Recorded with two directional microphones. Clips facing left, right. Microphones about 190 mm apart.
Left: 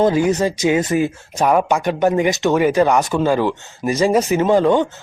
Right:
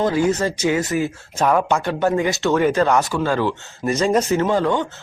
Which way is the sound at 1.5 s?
15° left (ahead or behind).